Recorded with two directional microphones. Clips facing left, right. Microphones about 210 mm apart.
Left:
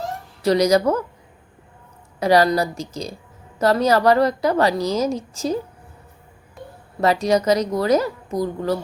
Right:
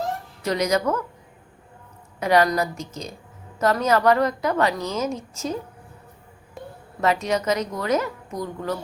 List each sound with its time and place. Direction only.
0.4 s a woman's voice: 35° left (ahead or behind)
2.1 s a woman's voice: 35° left (ahead or behind)
7.0 s a woman's voice: 35° left (ahead or behind)